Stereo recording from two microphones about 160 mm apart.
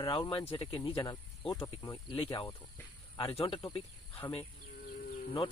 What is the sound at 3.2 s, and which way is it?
Speech, 35° left (ahead or behind).